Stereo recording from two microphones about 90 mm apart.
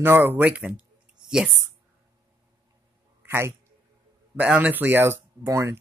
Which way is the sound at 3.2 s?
30° right (ahead or behind).